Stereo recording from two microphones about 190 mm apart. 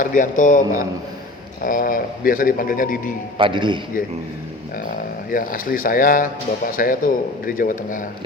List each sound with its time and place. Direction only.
0.0 s a man's voice: 45° left (ahead or behind)
3.3 s speech: 25° right (ahead or behind)
5.3 s a man's voice: 45° left (ahead or behind)